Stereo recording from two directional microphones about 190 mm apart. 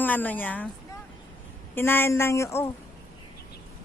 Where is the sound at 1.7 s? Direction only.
10° left (ahead or behind).